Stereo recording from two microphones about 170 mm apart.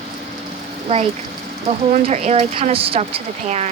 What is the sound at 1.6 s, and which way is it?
Speech, 45° right (ahead or behind).